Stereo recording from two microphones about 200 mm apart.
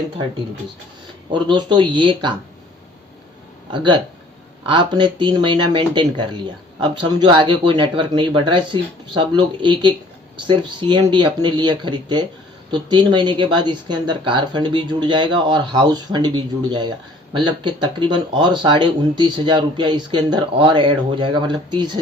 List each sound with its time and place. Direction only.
1.3 s speech: 25° right (ahead or behind)
4.7 s speech: 25° right (ahead or behind)